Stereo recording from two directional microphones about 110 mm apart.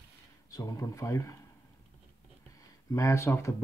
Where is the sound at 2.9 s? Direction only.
25° left (ahead or behind).